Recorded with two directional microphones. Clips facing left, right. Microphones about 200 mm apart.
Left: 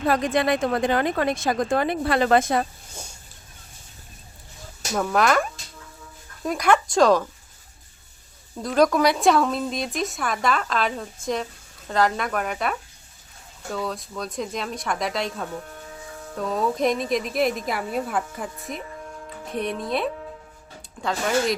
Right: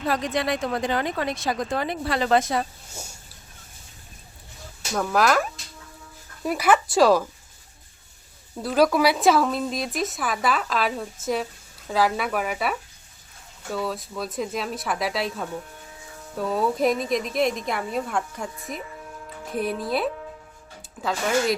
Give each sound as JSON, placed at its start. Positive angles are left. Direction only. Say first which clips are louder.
{"t": 0.0, "sound": "speech", "louder": "left 4 dB", "side_deg": 50}
{"t": 4.9, "sound": "a woman's voice", "louder": "even", "side_deg": 0}
{"t": 8.5, "sound": "a woman's voice", "louder": "even", "side_deg": -5}